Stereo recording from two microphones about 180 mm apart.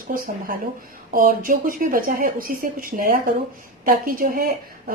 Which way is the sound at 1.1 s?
50° right (ahead or behind).